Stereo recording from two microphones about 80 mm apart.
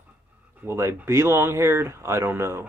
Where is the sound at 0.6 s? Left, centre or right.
Right.